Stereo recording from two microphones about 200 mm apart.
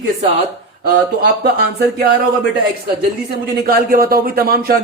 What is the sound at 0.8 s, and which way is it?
Speech, 50° right (ahead or behind).